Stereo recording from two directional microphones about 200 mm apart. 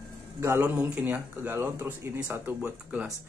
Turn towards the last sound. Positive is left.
turn(degrees=-5)  # may be behind; listen again after turning